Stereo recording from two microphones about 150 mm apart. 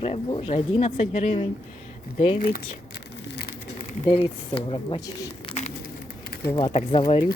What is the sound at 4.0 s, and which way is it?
Speech, 40° left (ahead or behind).